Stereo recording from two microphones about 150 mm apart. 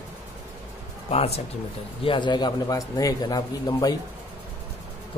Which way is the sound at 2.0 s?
30° left (ahead or behind).